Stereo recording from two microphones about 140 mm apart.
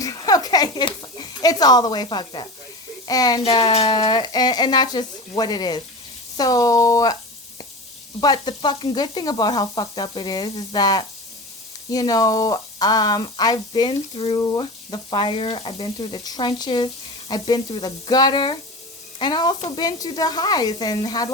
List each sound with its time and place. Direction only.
0.0 s a sound: 25° left (ahead or behind)
3.1 s speech: 25° left (ahead or behind)
3.4 s speech: 40° left (ahead or behind)
8.2 s speech: 30° left (ahead or behind)